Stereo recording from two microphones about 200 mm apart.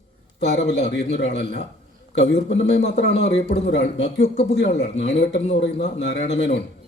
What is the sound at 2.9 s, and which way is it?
Speech, 60° left (ahead or behind).